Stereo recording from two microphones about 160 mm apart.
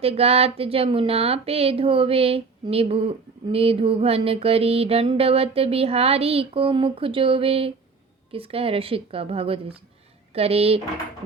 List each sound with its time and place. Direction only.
0.0 s speech: 40° right (ahead or behind)